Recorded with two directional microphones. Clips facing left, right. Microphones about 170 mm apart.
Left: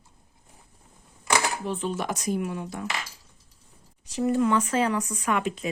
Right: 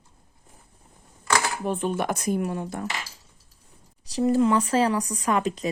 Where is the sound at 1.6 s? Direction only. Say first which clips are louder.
Right 3 dB; 50° right (ahead or behind).